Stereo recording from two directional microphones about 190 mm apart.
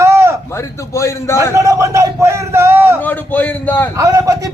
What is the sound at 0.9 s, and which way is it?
Speech, 15° left (ahead or behind).